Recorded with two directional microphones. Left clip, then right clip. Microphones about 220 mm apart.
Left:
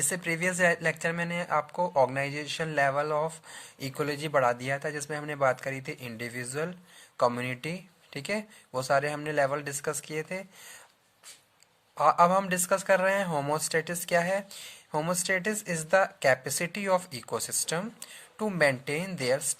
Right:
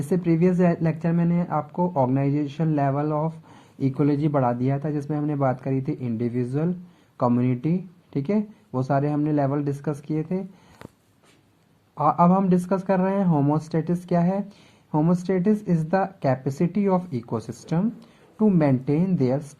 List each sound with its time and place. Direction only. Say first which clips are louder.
0.1 s speech: right 11 dB; 35° left (ahead or behind)
11.9 s speech: right 2 dB; 35° left (ahead or behind)